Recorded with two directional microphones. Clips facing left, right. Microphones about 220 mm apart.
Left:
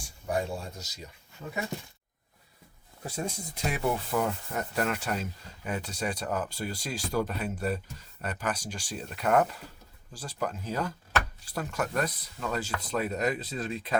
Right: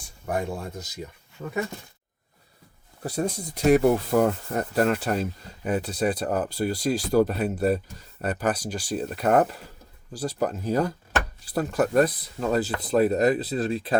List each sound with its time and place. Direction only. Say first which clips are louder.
0.3 s speech: right 3 dB; 50° right (ahead or behind)
3.2 s speech: right 16 dB; 40° right (ahead or behind)